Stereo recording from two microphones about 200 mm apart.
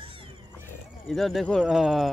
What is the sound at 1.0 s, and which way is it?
Speech, centre (ahead or behind).